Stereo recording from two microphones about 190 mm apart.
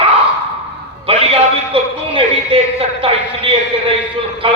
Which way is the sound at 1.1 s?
30° right (ahead or behind).